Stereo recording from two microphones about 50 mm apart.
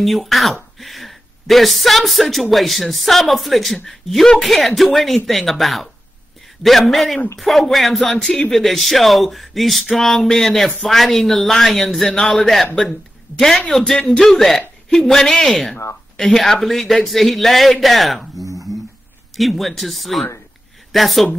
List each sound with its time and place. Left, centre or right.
0.0 s speech: centre